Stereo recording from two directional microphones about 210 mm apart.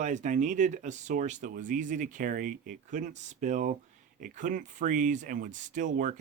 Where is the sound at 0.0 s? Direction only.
35° right (ahead or behind).